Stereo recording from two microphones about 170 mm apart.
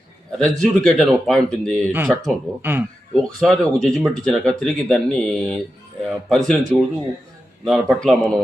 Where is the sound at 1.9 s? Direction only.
10° right (ahead or behind).